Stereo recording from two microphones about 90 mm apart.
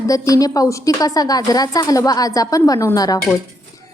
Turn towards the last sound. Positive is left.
turn(degrees=45)  # may be behind; listen again after turning